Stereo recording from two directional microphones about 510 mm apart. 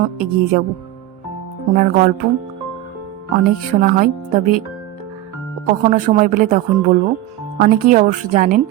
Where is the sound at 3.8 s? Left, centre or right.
Centre.